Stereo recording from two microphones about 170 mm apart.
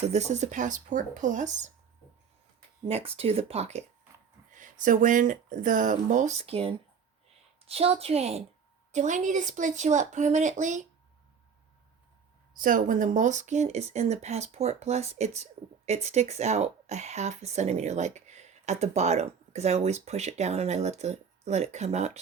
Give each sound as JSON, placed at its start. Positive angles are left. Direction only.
{"t": 0.0, "sound": "speech", "side_deg": -40}
{"t": 2.8, "sound": "speech", "side_deg": -35}
{"t": 4.5, "sound": "speech", "side_deg": -50}
{"t": 12.5, "sound": "speech", "side_deg": -50}